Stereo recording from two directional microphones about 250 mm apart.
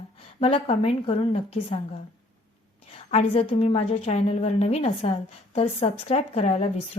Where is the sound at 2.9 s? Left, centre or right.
Left.